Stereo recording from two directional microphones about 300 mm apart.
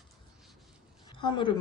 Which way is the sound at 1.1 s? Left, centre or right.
Centre.